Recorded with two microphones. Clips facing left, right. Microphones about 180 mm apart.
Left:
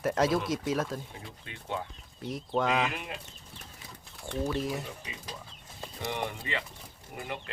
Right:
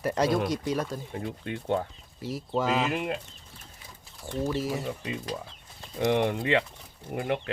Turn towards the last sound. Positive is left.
turn(degrees=-60)  # may be behind; listen again after turning